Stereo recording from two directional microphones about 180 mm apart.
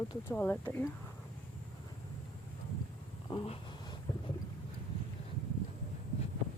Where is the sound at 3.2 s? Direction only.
30° left (ahead or behind).